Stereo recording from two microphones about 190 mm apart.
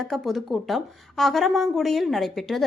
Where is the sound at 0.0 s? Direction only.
Centre (ahead or behind).